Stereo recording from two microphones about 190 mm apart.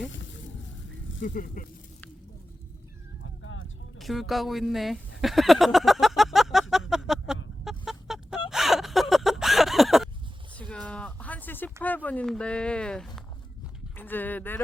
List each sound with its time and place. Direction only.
1.2 s speech: 45° left (ahead or behind)
3.4 s vehicle: 90° left
3.9 s speech: centre (ahead or behind)
6.9 s a sound: 5° right (ahead or behind)
7.6 s chicken: centre (ahead or behind)
8.4 s a sound: centre (ahead or behind)
12.0 s speech: 5° left (ahead or behind)